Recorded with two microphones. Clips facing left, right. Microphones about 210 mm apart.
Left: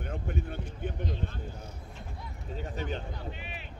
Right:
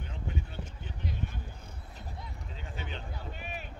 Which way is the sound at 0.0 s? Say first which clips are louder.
Left 4 dB; 55° left (ahead or behind).